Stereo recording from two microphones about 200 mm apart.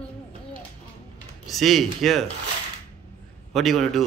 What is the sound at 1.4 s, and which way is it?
Speech, centre (ahead or behind).